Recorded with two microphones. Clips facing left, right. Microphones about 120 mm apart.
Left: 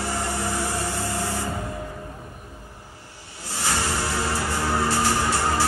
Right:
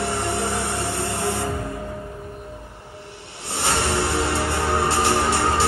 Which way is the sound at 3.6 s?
70° right (ahead or behind).